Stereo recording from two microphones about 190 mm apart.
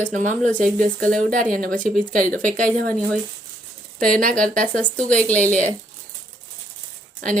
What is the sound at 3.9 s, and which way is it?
A woman's voice, 45° right (ahead or behind).